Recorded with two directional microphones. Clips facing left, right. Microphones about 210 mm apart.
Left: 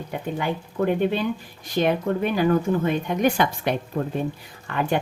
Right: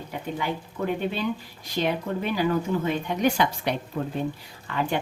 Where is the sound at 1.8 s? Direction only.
50° left (ahead or behind).